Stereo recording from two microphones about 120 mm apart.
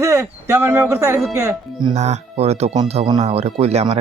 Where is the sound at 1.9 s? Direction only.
70° right (ahead or behind).